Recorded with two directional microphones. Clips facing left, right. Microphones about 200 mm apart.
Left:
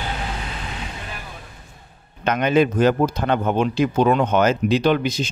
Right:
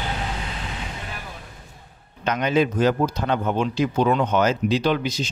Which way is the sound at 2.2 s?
60° left (ahead or behind).